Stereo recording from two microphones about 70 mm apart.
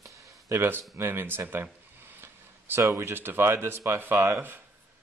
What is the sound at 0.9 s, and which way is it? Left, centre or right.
Speech, right.